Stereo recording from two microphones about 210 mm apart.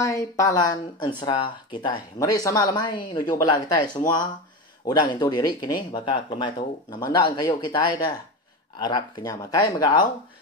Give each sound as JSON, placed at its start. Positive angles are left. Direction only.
{"t": 0.0, "sound": "speech", "side_deg": 15}